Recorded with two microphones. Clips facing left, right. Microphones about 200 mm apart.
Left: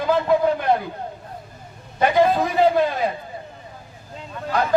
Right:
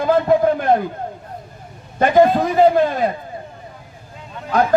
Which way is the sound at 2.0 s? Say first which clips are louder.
Right 4 dB; 45° right (ahead or behind).